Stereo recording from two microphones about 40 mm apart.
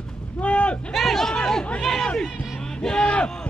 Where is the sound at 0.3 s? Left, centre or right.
Left.